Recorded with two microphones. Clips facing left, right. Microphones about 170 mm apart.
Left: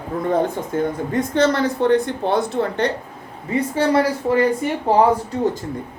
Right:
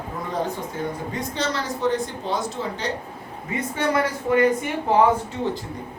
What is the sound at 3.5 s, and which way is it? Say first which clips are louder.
Speech: left 6 dB; 30° left (ahead or behind).